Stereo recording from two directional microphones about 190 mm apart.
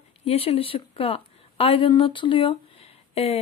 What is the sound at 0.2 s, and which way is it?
A woman's voice, 30° left (ahead or behind).